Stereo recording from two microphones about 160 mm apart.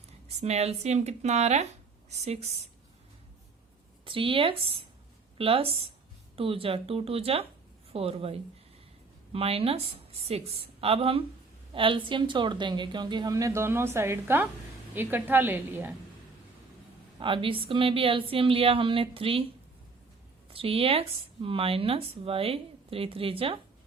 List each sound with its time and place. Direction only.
0.3 s speech: 45° right (ahead or behind)
4.0 s a woman's voice: 35° right (ahead or behind); by 16.0 s 15° right (ahead or behind)
17.2 s speech: 30° right (ahead or behind)
20.5 s speech: 35° right (ahead or behind)